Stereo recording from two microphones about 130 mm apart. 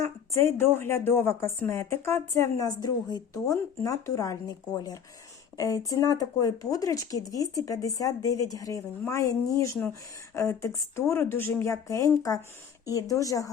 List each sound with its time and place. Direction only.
0.0 s speech: 20° left (ahead or behind)